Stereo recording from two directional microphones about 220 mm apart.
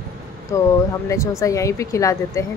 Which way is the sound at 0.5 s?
15° left (ahead or behind).